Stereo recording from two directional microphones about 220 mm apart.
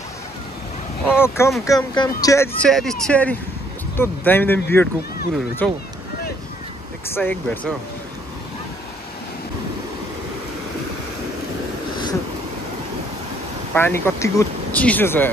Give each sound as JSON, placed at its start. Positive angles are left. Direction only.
{"t": 1.0, "sound": "speech", "side_deg": 10}
{"t": 7.2, "sound": "speech", "side_deg": 5}
{"t": 13.7, "sound": "speech", "side_deg": 10}